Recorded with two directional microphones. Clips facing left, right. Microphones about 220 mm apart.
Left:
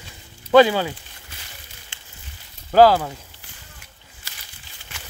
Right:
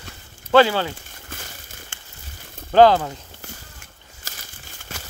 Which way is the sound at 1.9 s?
50° right (ahead or behind).